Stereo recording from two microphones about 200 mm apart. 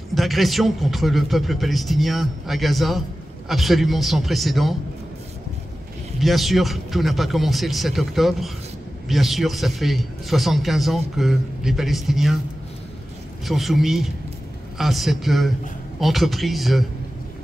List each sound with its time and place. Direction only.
0.1 s a man's voice: centre (ahead or behind)
6.1 s a man's voice: centre (ahead or behind)
13.5 s a man's voice: centre (ahead or behind)